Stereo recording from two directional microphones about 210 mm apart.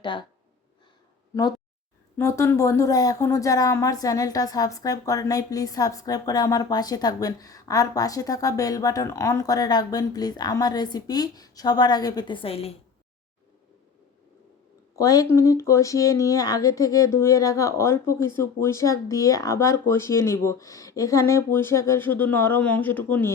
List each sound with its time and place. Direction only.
0.0 s speech: 20° left (ahead or behind)
2.1 s speech: 15° left (ahead or behind)
14.9 s speech: 15° left (ahead or behind)